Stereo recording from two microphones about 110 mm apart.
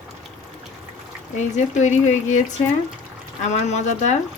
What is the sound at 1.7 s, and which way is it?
Speech, 90° left.